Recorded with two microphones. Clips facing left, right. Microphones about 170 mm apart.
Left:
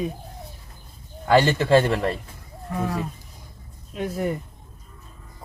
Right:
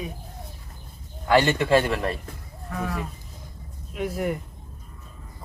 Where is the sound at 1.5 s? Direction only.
30° left (ahead or behind).